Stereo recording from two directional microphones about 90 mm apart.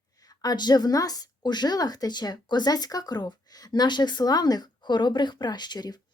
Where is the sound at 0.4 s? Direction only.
50° left (ahead or behind).